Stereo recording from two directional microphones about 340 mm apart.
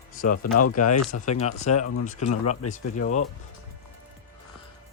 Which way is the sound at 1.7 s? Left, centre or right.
Left.